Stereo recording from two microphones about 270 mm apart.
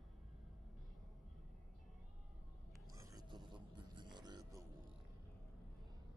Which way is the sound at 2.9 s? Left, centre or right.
Centre.